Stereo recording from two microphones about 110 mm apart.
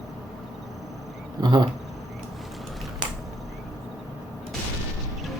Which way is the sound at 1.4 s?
40° right (ahead or behind).